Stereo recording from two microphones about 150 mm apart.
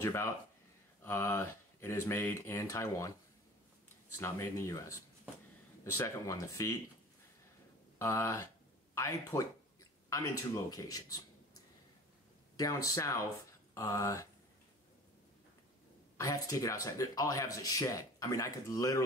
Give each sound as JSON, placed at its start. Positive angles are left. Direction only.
{"t": 0.0, "sound": "speech", "side_deg": 15}
{"t": 4.2, "sound": "speech", "side_deg": 20}
{"t": 8.0, "sound": "speech", "side_deg": 20}
{"t": 16.2, "sound": "speech", "side_deg": 20}